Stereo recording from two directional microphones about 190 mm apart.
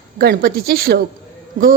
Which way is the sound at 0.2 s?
50° right (ahead or behind).